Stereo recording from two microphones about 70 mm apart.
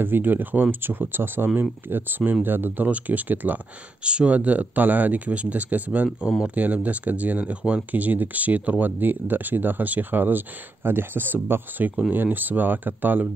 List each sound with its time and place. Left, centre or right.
0.0 s speech: right